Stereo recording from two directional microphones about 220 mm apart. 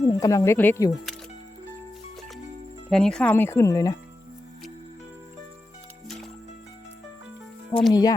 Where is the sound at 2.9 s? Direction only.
5° left (ahead or behind).